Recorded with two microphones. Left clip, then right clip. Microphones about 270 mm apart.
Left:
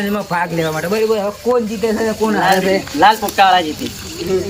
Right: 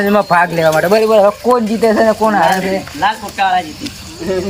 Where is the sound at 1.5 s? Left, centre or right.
Right.